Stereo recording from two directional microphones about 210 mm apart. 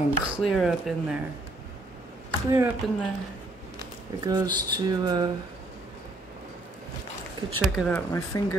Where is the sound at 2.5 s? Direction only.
10° right (ahead or behind).